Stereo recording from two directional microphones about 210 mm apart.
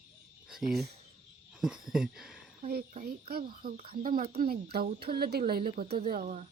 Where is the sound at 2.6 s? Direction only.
40° right (ahead or behind).